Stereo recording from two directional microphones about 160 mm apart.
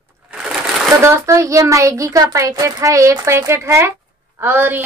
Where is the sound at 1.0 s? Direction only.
15° right (ahead or behind).